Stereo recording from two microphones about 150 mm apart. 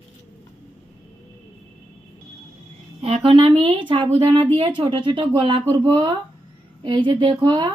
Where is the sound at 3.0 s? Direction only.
35° right (ahead or behind).